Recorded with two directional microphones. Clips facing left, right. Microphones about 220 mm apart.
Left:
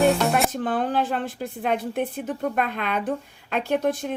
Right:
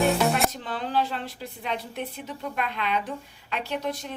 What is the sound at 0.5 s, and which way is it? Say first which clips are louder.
A woman's voice: left 5 dB; 50° left (ahead or behind).